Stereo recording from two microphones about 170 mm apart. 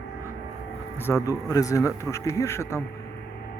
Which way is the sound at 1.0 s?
20° left (ahead or behind).